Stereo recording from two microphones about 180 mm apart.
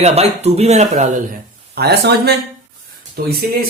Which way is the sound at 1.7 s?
65° right (ahead or behind).